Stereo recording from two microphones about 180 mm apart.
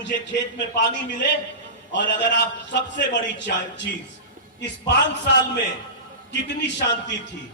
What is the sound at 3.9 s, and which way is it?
Speech, 65° left (ahead or behind).